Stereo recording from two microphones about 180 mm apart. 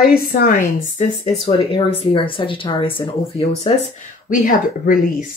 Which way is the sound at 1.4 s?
30° left (ahead or behind).